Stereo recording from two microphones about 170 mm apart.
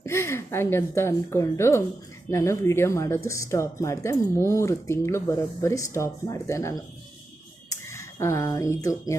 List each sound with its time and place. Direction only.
0.0 s a woman's voice: 15° left (ahead or behind)